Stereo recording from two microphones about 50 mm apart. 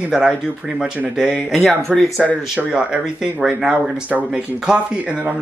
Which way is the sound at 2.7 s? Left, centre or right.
Centre.